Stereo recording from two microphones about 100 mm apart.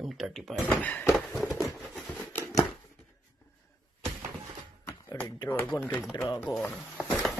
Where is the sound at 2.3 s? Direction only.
20° left (ahead or behind).